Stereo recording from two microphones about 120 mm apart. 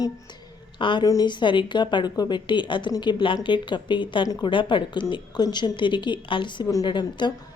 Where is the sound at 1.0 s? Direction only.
35° left (ahead or behind).